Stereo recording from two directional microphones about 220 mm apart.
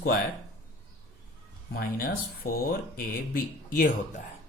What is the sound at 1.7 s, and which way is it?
Speech, 40° left (ahead or behind).